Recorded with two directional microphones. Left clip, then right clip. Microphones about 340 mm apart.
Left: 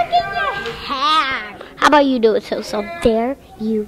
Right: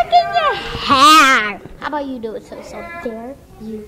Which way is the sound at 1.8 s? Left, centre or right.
Left.